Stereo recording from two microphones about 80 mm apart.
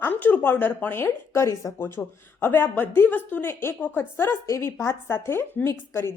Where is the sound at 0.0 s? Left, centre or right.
Left.